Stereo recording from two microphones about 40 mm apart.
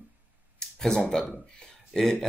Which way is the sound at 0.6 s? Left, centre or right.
Centre.